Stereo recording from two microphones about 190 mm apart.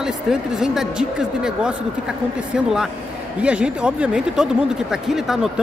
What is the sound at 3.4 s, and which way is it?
A woman's voice, 5° right (ahead or behind).